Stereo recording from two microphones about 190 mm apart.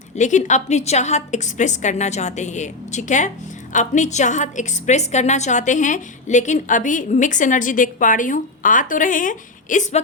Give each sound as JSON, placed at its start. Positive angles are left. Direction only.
{"t": 0.2, "sound": "a woman's voice", "side_deg": 40}